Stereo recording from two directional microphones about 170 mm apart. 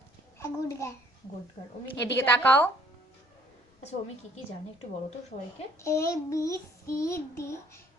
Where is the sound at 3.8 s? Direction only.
40° left (ahead or behind).